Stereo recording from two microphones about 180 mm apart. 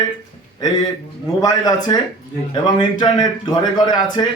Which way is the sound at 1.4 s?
20° left (ahead or behind).